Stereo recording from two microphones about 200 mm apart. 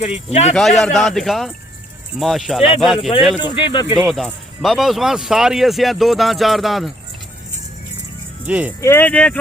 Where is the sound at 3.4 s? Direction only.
25° left (ahead or behind).